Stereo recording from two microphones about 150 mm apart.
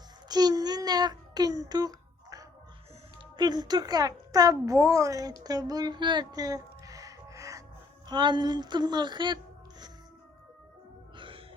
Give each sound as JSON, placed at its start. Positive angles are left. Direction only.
{"t": 0.3, "sound": "a sound", "side_deg": -25}
{"t": 3.3, "sound": "a child's voice", "side_deg": -30}
{"t": 11.2, "sound": "music", "side_deg": -35}